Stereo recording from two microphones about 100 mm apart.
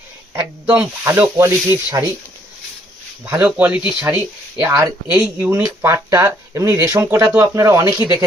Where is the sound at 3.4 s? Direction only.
15° right (ahead or behind); by 7.8 s 30° right (ahead or behind).